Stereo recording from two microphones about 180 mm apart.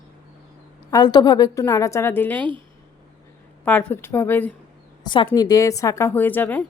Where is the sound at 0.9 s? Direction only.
20° left (ahead or behind).